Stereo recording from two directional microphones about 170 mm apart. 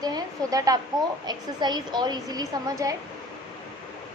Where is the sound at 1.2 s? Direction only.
25° right (ahead or behind).